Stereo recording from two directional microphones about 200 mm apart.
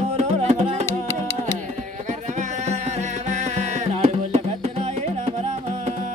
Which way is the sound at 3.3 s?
35° right (ahead or behind).